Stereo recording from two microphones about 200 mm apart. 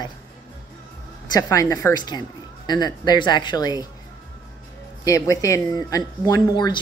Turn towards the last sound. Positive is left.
turn(degrees=20)  # may be behind; listen again after turning